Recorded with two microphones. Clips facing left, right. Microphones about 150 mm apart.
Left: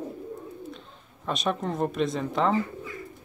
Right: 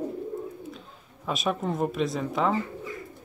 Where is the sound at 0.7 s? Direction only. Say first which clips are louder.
Right 1 dB; 5° right (ahead or behind).